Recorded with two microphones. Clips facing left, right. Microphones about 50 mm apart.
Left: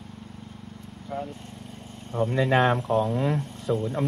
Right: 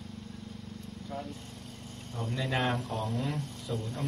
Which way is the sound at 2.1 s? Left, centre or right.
Left.